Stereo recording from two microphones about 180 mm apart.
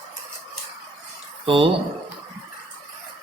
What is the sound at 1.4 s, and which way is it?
Speech, 30° right (ahead or behind).